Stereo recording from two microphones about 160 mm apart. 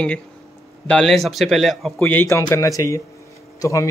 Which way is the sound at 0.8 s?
5° left (ahead or behind).